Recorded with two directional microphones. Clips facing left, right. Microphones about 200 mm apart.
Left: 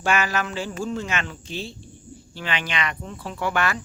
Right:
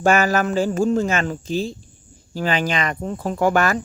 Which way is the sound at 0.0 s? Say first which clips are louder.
Right 7 dB; 45° right (ahead or behind).